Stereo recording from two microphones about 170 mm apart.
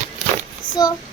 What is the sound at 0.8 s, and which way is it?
Speech, 25° left (ahead or behind).